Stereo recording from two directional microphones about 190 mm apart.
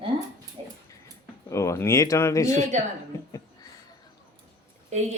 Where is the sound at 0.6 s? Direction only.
30° right (ahead or behind).